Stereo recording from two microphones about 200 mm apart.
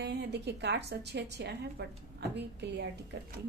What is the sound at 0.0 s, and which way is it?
A woman's voice, 55° right (ahead or behind).